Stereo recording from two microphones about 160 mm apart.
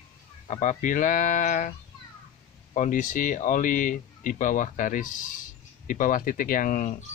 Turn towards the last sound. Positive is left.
turn(degrees=55)  # may be behind; listen again after turning